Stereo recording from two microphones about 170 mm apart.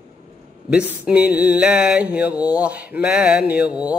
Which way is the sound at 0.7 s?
5° right (ahead or behind).